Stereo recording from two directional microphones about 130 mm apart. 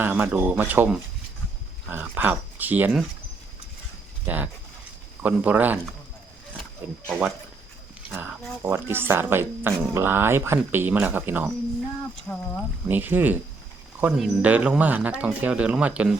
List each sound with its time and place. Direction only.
0.0 s speech: 15° right (ahead or behind)
4.3 s speech: 15° right (ahead or behind)
7.1 s speech: 5° right (ahead or behind)
8.6 s speech: 15° right (ahead or behind)
12.3 s speech: 20° left (ahead or behind)
12.9 s speech: 15° right (ahead or behind)